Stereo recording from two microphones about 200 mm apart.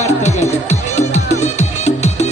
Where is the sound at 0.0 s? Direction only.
35° left (ahead or behind).